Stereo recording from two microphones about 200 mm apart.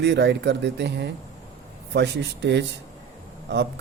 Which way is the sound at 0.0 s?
60° right (ahead or behind).